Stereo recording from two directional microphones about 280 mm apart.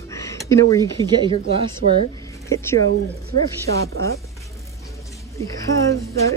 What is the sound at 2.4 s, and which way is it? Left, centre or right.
Speech, centre.